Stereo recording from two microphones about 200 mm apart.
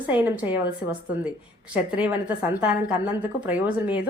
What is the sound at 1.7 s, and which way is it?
A woman's voice, 5° right (ahead or behind).